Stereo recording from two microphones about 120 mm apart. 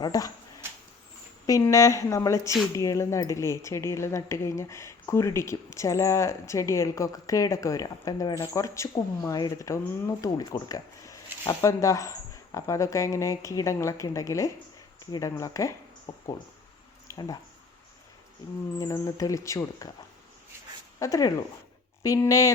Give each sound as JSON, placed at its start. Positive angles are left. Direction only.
{"t": 0.0, "sound": "speech", "side_deg": 30}
{"t": 1.5, "sound": "speech", "side_deg": 30}
{"t": 17.1, "sound": "a sound", "side_deg": 30}
{"t": 18.8, "sound": "speech", "side_deg": 30}
{"t": 21.0, "sound": "speech", "side_deg": 30}